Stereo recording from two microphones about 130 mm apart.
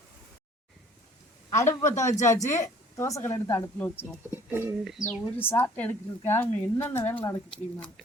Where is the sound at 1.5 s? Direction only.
25° left (ahead or behind).